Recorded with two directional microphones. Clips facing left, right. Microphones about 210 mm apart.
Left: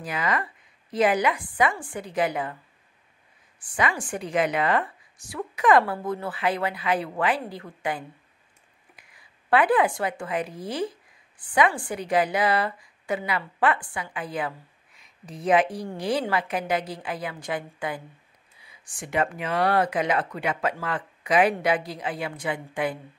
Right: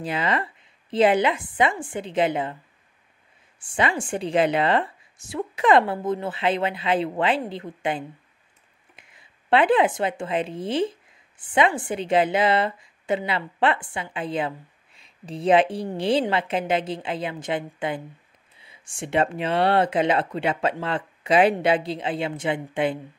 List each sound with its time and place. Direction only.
0.0 s speech: 25° right (ahead or behind)
3.5 s speech: 25° right (ahead or behind)